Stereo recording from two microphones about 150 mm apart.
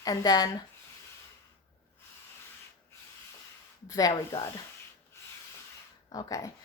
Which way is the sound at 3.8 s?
25° left (ahead or behind).